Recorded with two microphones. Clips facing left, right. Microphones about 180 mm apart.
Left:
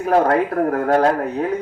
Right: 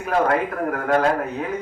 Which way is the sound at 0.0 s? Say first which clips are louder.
Left 4 dB; 35° left (ahead or behind).